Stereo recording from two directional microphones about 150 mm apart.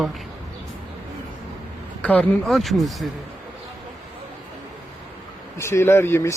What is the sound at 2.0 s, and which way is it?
Speech, 10° left (ahead or behind).